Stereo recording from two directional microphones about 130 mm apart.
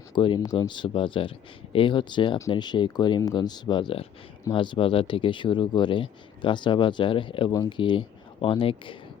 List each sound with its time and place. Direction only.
0.1 s speech: 40° left (ahead or behind)
0.3 s speech: 30° left (ahead or behind)
7.5 s speech: 25° left (ahead or behind)
7.8 s speech: 40° left (ahead or behind)